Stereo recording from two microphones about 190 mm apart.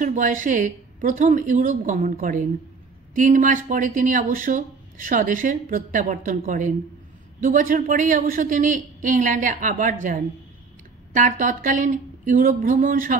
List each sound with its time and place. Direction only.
0.0 s a woman's voice: 45° right (ahead or behind)